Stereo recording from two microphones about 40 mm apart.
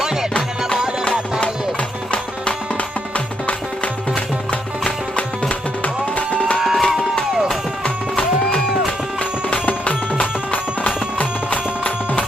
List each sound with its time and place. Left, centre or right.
5.1 s music: left
6.6 s a sound: centre
9.5 s music: left